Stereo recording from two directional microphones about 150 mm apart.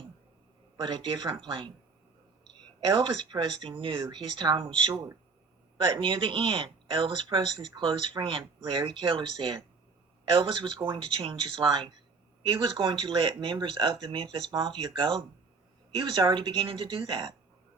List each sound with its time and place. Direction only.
0.8 s speech: 30° right (ahead or behind)
2.8 s speech: 30° right (ahead or behind)